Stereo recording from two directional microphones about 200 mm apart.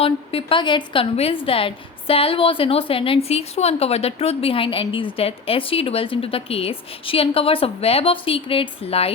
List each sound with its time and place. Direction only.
0.0 s a woman's voice: 30° left (ahead or behind)